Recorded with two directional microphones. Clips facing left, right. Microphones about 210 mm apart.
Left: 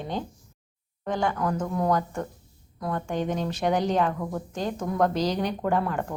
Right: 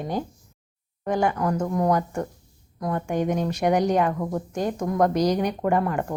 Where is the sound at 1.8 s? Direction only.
15° right (ahead or behind).